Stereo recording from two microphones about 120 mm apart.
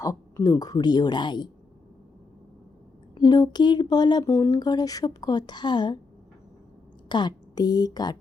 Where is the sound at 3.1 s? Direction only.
35° left (ahead or behind).